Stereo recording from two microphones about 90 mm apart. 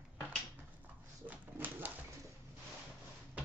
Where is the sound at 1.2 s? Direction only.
20° right (ahead or behind).